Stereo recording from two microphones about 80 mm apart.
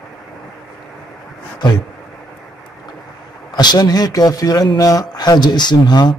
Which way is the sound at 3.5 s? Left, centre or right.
Left.